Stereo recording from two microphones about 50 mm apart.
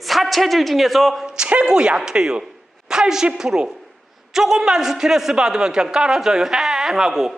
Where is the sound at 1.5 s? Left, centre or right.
Right.